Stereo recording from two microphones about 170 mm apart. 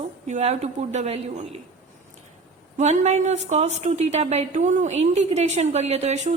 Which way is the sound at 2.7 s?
45° right (ahead or behind).